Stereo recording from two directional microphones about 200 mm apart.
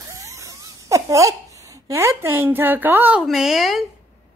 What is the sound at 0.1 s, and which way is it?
Speech, 15° right (ahead or behind).